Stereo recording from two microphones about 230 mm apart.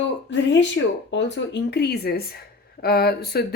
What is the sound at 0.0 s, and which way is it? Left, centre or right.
Speech, left.